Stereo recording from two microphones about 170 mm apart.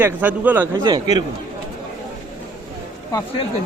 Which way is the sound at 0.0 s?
10° right (ahead or behind).